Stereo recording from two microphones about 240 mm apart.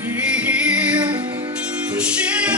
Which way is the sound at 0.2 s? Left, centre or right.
Centre.